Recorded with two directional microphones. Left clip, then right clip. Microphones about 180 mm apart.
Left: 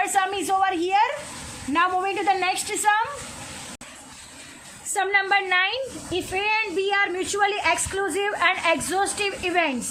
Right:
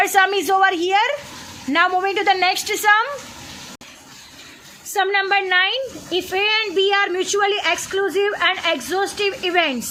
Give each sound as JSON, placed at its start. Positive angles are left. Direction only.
{"t": 0.0, "sound": "a woman's voice", "side_deg": -40}
{"t": 4.9, "sound": "a child's voice", "side_deg": -15}
{"t": 6.3, "sound": "a child's voice", "side_deg": -25}